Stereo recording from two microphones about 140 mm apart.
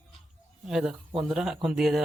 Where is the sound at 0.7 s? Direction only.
5° right (ahead or behind).